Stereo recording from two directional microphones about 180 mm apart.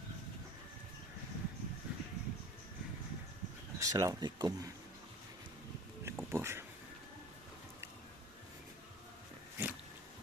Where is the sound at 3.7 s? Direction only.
20° right (ahead or behind).